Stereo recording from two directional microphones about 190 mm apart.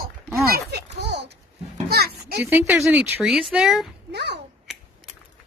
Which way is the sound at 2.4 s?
10° right (ahead or behind).